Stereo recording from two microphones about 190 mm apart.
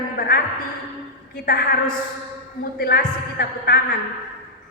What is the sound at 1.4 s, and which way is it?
A woman's voice, 55° left (ahead or behind).